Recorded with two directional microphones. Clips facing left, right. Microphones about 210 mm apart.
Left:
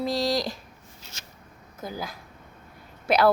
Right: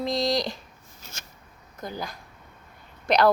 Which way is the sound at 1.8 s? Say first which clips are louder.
Even; 5° left (ahead or behind).